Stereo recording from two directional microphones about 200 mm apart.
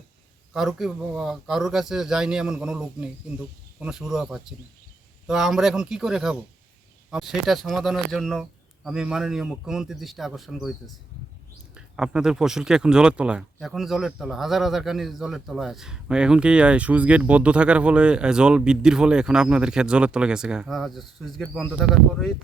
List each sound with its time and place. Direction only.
0.5 s speech: centre (ahead or behind)
11.9 s speech: 5° right (ahead or behind)